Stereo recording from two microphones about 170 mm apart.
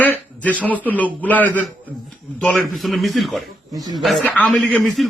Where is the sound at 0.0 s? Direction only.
10° left (ahead or behind).